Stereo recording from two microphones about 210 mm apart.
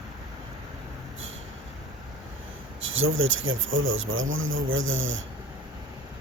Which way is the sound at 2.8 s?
70° right (ahead or behind).